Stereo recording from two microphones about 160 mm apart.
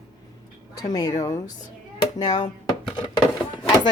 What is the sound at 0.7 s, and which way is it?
Speech, 25° left (ahead or behind).